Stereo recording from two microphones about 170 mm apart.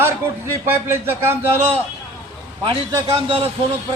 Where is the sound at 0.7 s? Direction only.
15° right (ahead or behind).